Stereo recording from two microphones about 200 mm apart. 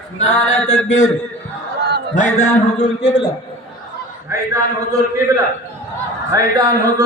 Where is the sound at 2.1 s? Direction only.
35° left (ahead or behind).